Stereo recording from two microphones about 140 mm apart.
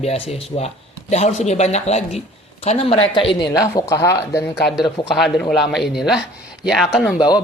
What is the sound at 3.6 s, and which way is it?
Speech, 20° left (ahead or behind).